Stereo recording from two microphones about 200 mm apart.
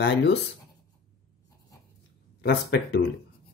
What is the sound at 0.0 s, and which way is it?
Speech, 60° left (ahead or behind).